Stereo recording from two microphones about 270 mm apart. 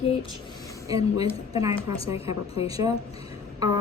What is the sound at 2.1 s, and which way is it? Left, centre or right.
Speech, left.